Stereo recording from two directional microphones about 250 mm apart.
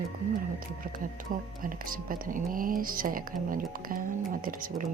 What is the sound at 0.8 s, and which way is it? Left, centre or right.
Speech, right.